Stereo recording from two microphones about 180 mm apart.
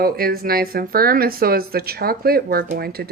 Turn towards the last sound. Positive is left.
turn(degrees=-60)  # may be behind; listen again after turning